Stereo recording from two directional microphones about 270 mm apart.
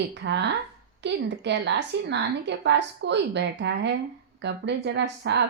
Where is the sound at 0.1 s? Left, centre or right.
Right.